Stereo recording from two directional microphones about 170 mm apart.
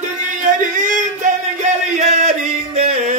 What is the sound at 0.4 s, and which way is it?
Music, 50° right (ahead or behind).